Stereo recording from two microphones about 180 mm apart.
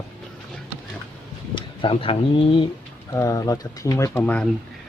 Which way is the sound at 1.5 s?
30° left (ahead or behind).